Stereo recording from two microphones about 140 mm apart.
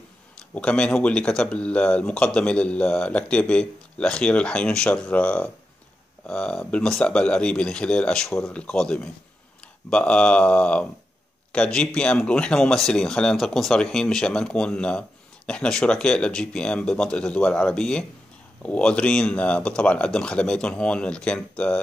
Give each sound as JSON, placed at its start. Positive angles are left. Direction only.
{"t": 0.6, "sound": "speech", "side_deg": 10}